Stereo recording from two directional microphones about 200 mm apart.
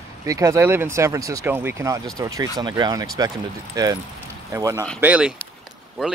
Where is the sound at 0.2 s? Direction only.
15° right (ahead or behind).